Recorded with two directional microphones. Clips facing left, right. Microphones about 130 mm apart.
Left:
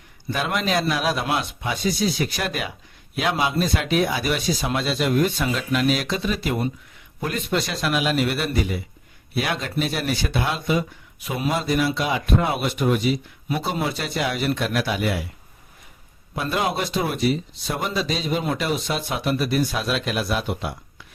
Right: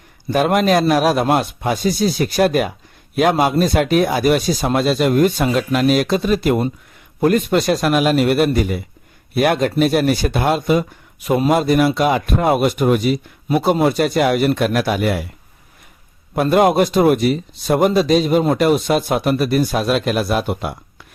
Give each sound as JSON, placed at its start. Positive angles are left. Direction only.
{"t": 0.3, "sound": "speech", "side_deg": -45}
{"t": 16.3, "sound": "speech", "side_deg": -55}